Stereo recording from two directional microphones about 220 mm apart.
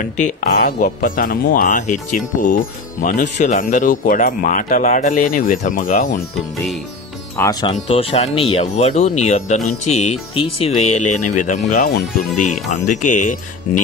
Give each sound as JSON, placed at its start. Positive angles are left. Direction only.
{"t": 0.4, "sound": "speech", "side_deg": 40}
{"t": 7.6, "sound": "speech", "side_deg": 25}